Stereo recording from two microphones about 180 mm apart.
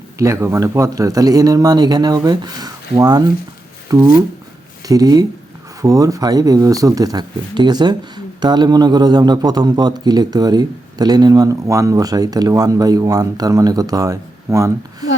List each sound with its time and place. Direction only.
0.2 s speech: 15° right (ahead or behind)